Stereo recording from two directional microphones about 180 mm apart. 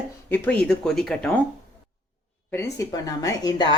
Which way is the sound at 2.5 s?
15° left (ahead or behind).